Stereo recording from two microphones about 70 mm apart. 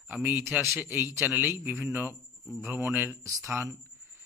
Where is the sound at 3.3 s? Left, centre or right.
Right.